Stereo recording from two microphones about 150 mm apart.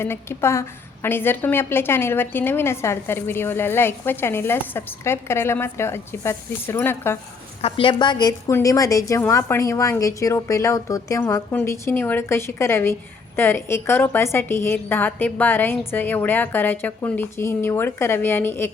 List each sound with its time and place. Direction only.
0.0 s a woman's voice: 15° left (ahead or behind)
7.6 s a woman's voice: 35° left (ahead or behind); by 18.7 s 15° left (ahead or behind)